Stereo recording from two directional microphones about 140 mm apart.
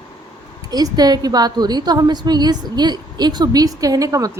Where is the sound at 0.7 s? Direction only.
30° right (ahead or behind).